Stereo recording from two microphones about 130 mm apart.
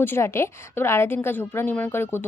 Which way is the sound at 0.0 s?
20° left (ahead or behind).